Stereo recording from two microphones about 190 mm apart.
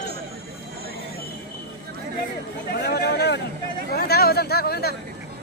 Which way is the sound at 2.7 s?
60° left (ahead or behind).